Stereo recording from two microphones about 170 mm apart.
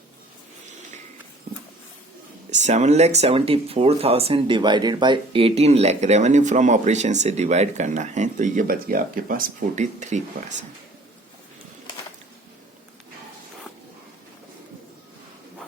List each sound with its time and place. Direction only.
2.5 s speech: 45° right (ahead or behind)